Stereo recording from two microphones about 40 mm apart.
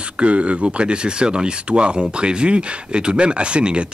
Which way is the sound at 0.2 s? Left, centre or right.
Right.